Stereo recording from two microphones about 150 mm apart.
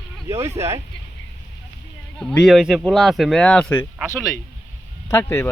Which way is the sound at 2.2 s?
5° left (ahead or behind).